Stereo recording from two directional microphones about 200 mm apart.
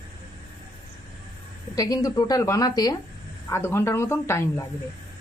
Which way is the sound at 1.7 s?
20° left (ahead or behind).